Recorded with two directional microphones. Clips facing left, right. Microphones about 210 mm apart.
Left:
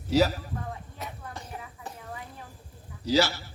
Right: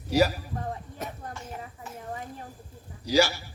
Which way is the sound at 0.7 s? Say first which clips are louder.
Right 3 dB; 45° right (ahead or behind).